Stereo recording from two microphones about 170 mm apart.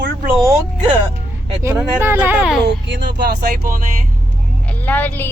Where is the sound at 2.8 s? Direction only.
80° right; by 3.8 s 60° right (ahead or behind).